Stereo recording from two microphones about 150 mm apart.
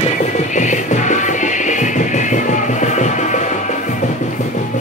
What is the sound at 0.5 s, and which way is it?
Music, 55° left (ahead or behind).